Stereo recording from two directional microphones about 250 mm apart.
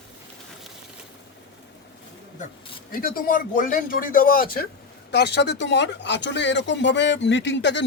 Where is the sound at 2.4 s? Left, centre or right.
Left.